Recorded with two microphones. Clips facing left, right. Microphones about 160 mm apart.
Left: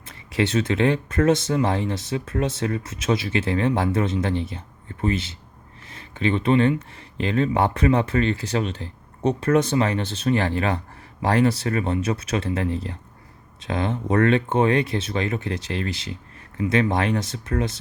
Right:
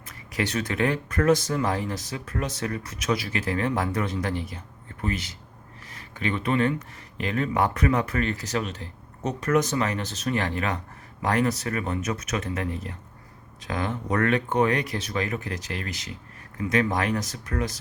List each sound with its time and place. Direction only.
0.0 s speech: 25° left (ahead or behind)